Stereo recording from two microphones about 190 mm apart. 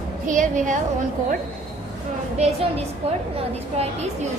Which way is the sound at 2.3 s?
35° right (ahead or behind).